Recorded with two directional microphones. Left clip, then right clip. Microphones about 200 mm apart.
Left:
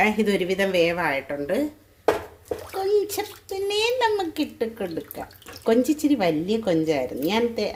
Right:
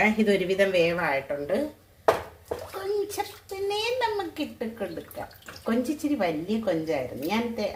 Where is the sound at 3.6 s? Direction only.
45° left (ahead or behind).